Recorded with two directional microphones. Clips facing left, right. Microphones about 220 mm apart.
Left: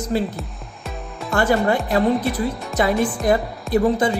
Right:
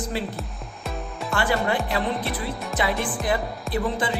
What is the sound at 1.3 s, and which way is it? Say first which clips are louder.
Speech: left 6 dB; 45° left (ahead or behind).